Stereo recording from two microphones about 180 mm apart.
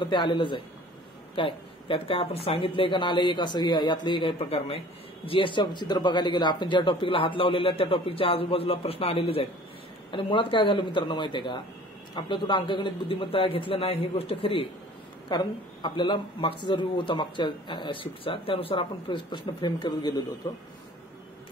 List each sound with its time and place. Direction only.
0.0 s speech: 25° left (ahead or behind)